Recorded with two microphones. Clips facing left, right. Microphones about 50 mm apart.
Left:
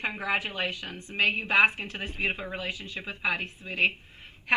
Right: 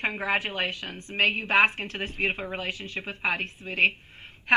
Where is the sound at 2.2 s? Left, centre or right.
Right.